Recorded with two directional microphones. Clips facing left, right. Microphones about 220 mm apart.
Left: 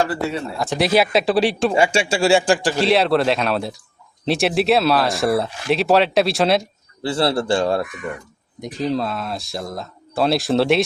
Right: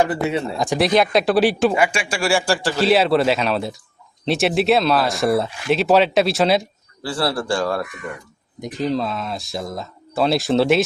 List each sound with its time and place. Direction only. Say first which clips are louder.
0.1 s speech: right 2 dB; 20° right (ahead or behind)
0.8 s speech: even; 5° left (ahead or behind)
1.7 s a man's voice: left 3 dB; 25° left (ahead or behind)
2.7 s speech: right 4 dB; centre (ahead or behind)
7.0 s a man's voice: left 3 dB; 25° left (ahead or behind)
8.6 s speech: even; centre (ahead or behind)